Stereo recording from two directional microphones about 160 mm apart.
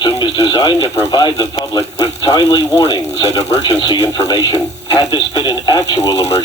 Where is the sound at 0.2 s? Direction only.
30° left (ahead or behind).